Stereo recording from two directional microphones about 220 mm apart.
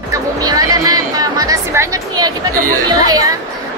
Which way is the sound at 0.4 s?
15° right (ahead or behind).